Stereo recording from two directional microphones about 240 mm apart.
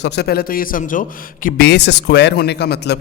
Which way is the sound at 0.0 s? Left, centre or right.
Left.